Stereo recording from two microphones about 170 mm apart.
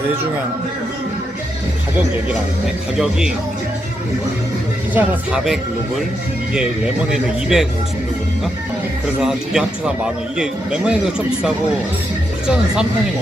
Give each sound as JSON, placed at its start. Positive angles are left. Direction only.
{"t": 3.0, "sound": "speech", "side_deg": -5}
{"t": 4.9, "sound": "speech", "side_deg": -5}
{"t": 7.1, "sound": "speech", "side_deg": -5}
{"t": 9.2, "sound": "speech", "side_deg": -5}